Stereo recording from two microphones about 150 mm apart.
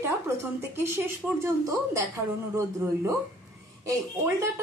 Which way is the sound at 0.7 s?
15° right (ahead or behind).